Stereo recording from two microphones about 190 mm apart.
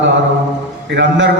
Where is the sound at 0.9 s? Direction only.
70° right (ahead or behind).